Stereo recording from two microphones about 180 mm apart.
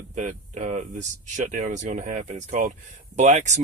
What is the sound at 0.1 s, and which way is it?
Speech, 40° right (ahead or behind).